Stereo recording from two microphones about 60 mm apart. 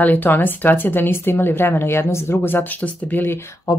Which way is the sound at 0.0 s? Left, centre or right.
Left.